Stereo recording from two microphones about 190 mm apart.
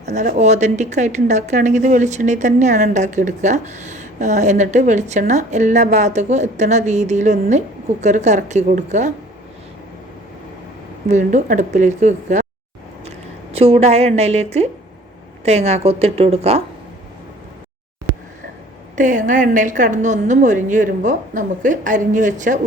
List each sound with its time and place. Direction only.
0.0 s speech: 40° right (ahead or behind)
11.1 s a woman's voice: 40° right (ahead or behind)
18.9 s speech: 40° right (ahead or behind)